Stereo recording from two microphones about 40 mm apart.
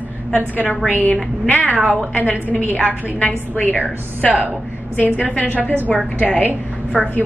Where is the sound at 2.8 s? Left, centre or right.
Left.